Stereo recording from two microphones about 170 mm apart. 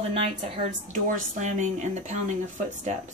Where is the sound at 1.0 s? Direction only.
45° right (ahead or behind).